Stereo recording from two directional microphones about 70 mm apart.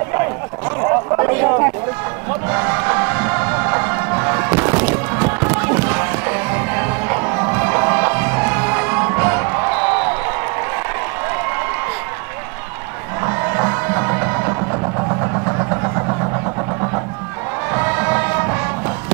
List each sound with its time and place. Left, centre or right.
0.7 s a sound: right
2.5 s music: right
13.2 s music: right
15.0 s vehicle: right
17.6 s music: right